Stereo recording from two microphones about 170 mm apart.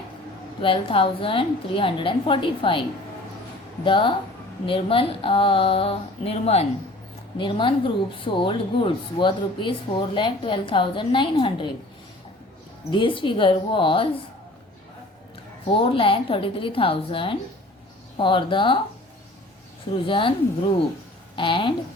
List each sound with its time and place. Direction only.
0.6 s a woman's voice: 30° left (ahead or behind)
3.8 s a woman's voice: 30° left (ahead or behind)
12.9 s speech: 30° left (ahead or behind)
15.6 s a woman's voice: 30° left (ahead or behind)
19.9 s a woman's voice: 30° left (ahead or behind)
21.3 s speech: 30° left (ahead or behind)